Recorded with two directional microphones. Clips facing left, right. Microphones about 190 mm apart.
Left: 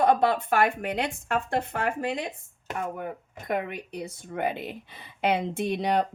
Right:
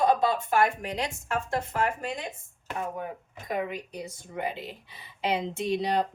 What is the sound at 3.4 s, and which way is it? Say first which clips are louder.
A woman's voice: left 1 dB; 65° left (ahead or behind).